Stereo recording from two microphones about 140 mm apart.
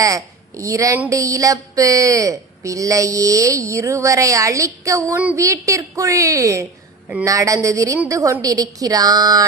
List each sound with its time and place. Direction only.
0.0 s a woman's voice: 25° right (ahead or behind)